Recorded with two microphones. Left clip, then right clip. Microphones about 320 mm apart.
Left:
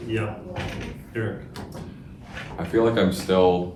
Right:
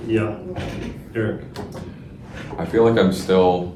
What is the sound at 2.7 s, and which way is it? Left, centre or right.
Speech, right.